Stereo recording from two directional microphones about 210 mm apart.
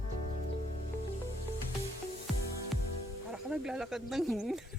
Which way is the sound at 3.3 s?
5° right (ahead or behind).